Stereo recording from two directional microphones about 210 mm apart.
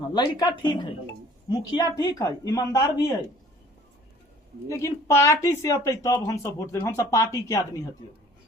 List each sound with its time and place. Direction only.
0.1 s speech: 20° left (ahead or behind)
4.7 s speech: 15° left (ahead or behind)